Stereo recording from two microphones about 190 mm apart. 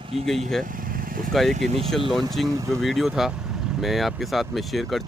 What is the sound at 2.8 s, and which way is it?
Speech, centre (ahead or behind).